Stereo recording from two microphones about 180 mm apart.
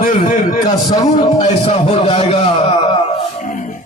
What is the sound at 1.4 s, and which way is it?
A man's voice, 35° left (ahead or behind).